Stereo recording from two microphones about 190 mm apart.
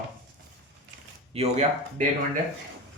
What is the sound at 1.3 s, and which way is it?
Speech, 35° right (ahead or behind).